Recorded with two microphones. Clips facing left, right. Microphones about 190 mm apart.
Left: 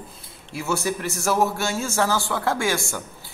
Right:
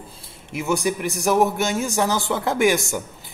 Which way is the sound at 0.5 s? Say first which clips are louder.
Right 3 dB; 15° right (ahead or behind).